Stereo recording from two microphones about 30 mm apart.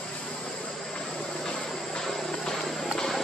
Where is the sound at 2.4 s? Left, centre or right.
Centre.